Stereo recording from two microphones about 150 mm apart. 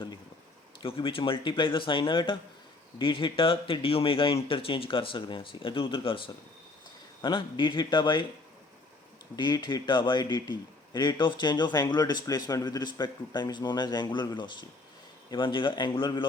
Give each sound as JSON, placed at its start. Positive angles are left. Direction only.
{"t": 0.8, "sound": "speech", "side_deg": 35}
{"t": 9.3, "sound": "a man's voice", "side_deg": 30}